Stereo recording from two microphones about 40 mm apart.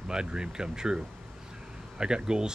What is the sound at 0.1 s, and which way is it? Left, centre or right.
Speech, centre.